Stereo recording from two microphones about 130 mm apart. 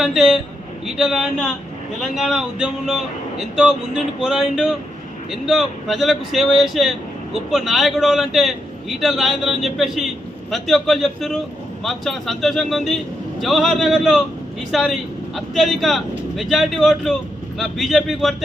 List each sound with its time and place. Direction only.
0.0 s speech: 5° right (ahead or behind)